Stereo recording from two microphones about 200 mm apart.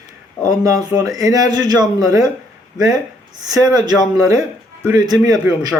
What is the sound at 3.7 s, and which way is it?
A man's voice, 20° right (ahead or behind).